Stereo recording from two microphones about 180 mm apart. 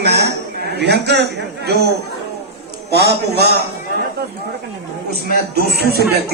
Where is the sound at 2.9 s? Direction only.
65° right (ahead or behind).